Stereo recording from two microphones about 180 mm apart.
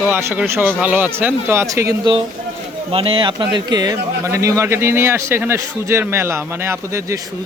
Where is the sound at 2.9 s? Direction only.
30° right (ahead or behind).